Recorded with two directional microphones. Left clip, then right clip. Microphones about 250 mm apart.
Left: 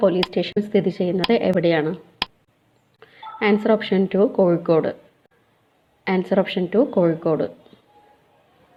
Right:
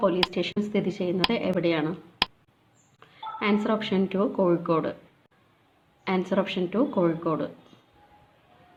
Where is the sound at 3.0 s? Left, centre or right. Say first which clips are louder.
Left 6 dB; centre.